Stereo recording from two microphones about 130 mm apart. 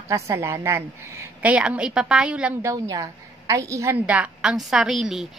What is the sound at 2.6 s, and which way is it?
A woman's voice, 25° right (ahead or behind).